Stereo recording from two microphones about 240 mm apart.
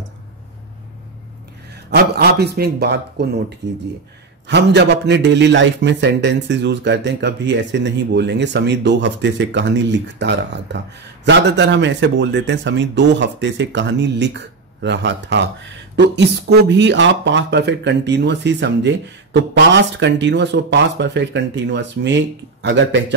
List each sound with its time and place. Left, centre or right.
1.7 s a man's voice: right